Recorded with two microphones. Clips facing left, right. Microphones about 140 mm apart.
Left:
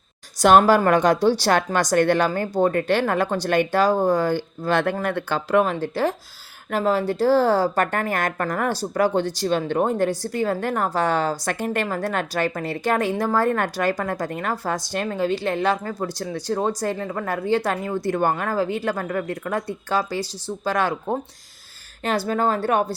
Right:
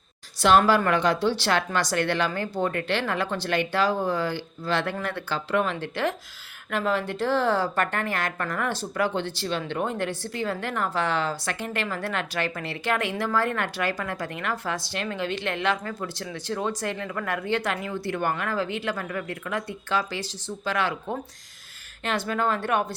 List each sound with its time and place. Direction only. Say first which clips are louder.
0.4 s a woman's voice: left 5 dB; 45° left (ahead or behind)